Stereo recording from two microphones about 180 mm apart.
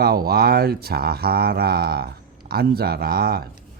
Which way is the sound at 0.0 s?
60° right (ahead or behind).